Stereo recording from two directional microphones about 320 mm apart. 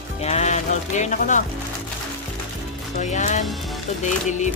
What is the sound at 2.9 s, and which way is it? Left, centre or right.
Speech, left.